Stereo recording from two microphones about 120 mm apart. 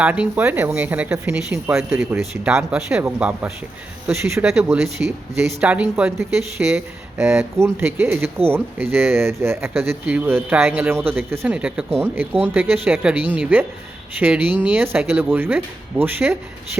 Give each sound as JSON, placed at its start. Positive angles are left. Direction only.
{"t": 0.0, "sound": "speech", "side_deg": -10}
{"t": 2.0, "sound": "speech", "side_deg": -20}
{"t": 2.4, "sound": "speech", "side_deg": -5}